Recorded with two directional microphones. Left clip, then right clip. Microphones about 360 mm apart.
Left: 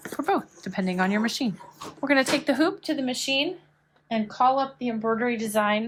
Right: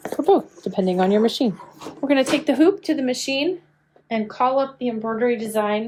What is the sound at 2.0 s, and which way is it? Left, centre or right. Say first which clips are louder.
Speech: right 3 dB; centre.